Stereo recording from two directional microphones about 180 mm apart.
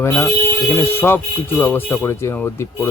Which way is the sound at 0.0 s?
10° left (ahead or behind).